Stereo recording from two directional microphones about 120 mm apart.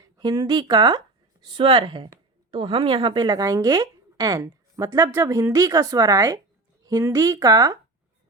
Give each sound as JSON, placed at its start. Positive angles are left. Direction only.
{"t": 0.0, "sound": "a woman's voice", "side_deg": -35}